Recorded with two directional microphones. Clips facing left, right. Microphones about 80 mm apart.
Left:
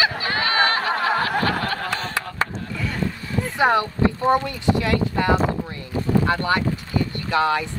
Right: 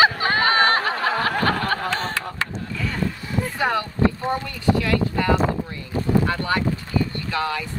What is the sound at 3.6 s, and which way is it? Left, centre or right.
Speech, left.